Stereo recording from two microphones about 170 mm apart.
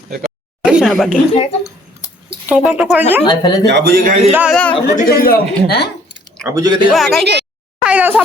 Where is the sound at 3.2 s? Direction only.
25° left (ahead or behind).